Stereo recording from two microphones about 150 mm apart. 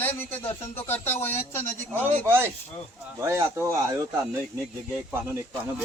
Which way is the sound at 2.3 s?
15° right (ahead or behind).